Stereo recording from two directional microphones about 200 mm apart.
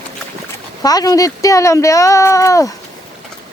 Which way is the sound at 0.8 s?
20° left (ahead or behind).